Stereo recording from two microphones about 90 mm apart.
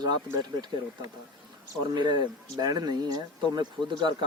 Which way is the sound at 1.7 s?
55° right (ahead or behind).